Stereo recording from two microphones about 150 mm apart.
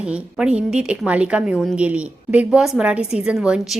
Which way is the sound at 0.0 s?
5° right (ahead or behind).